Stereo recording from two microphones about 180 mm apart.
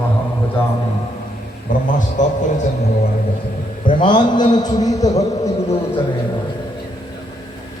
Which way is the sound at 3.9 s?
25° left (ahead or behind).